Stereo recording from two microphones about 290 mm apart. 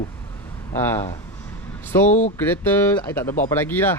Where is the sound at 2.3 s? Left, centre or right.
Centre.